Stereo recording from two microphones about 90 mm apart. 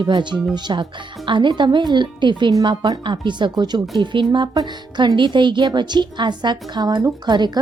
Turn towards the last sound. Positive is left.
turn(degrees=-55)  # may be behind; listen again after turning